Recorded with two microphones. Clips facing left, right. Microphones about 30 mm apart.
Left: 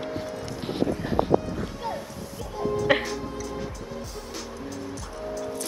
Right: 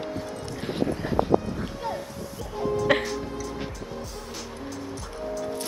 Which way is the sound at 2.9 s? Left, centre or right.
Centre.